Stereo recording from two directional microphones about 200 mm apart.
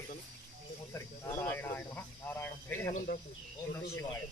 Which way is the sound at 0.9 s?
15° left (ahead or behind).